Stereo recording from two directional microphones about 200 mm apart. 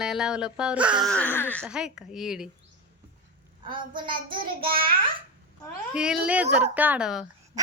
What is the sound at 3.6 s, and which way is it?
Child singing, 25° right (ahead or behind).